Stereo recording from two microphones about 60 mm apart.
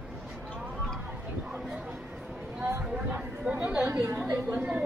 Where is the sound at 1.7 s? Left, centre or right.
Right.